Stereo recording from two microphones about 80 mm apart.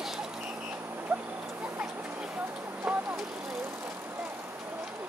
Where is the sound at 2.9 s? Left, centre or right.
Centre.